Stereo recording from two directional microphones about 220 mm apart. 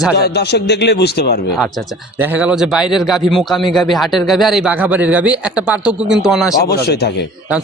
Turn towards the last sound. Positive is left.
turn(degrees=45)  # may be behind; listen again after turning